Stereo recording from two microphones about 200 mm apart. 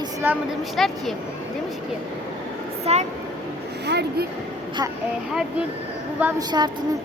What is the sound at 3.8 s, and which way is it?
Speech, 55° right (ahead or behind).